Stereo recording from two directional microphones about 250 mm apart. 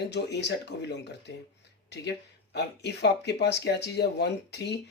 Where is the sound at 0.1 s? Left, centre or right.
Left.